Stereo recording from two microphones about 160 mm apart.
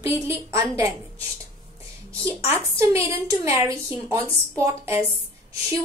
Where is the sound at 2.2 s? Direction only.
15° right (ahead or behind).